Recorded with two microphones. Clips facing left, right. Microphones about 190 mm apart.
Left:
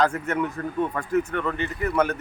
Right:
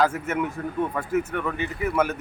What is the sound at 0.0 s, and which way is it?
Speech, 5° right (ahead or behind).